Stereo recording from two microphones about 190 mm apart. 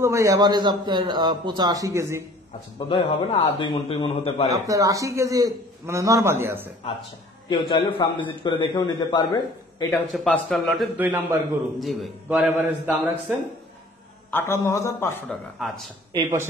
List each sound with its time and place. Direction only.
0.0 s a man's voice: 15° right (ahead or behind)
2.9 s a man's voice: 25° left (ahead or behind)
4.5 s a man's voice: 20° right (ahead or behind)
7.4 s a man's voice: 25° left (ahead or behind)
9.8 s a man's voice: centre (ahead or behind)
11.0 s a man's voice: 10° right (ahead or behind)
14.3 s a man's voice: 15° left (ahead or behind)
15.2 s a man's voice: centre (ahead or behind)
16.1 s a man's voice: 20° right (ahead or behind)